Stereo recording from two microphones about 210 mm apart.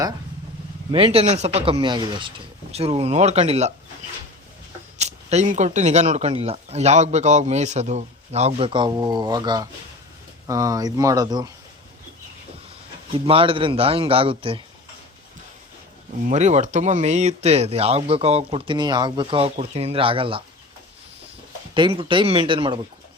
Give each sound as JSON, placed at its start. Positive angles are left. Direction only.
{"t": 0.9, "sound": "speech", "side_deg": -25}
{"t": 4.9, "sound": "speech", "side_deg": -30}
{"t": 13.1, "sound": "speech", "side_deg": -25}
{"t": 16.2, "sound": "speech", "side_deg": -35}
{"t": 21.8, "sound": "speech", "side_deg": -25}